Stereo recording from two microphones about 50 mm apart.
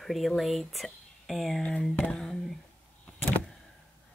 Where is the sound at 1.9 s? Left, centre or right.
Left.